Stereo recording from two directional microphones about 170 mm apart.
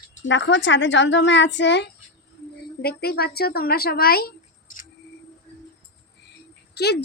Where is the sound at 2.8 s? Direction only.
65° left (ahead or behind).